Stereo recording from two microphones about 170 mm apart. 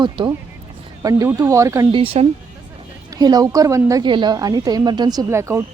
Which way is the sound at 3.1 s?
25° right (ahead or behind).